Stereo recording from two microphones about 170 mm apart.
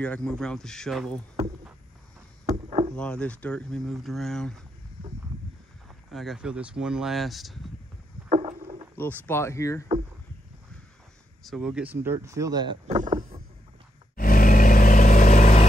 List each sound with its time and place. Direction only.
0.0 s speech: 5° left (ahead or behind)
2.5 s rowboat: 40° right (ahead or behind)
2.9 s speech: 5° left (ahead or behind)
6.0 s speech: centre (ahead or behind)
8.3 s rowboat: 35° right (ahead or behind)
8.9 s speech: 10° left (ahead or behind)
11.4 s speech: centre (ahead or behind); by 12.7 s 20° right (ahead or behind)
12.8 s rowboat: 45° right (ahead or behind)
14.1 s vehicle: 55° left (ahead or behind)